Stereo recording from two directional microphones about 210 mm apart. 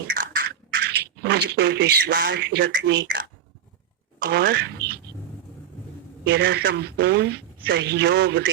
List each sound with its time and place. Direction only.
0.2 s a sound: 50° right (ahead or behind)
4.2 s speech: 50° right (ahead or behind)
6.2 s speech: 55° right (ahead or behind)